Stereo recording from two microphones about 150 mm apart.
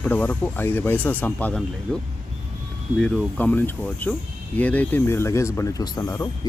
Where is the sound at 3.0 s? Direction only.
5° left (ahead or behind).